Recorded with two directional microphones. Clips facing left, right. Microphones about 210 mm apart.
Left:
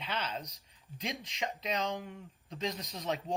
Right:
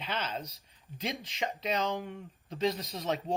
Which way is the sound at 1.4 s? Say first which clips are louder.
Right 3 dB; 35° right (ahead or behind).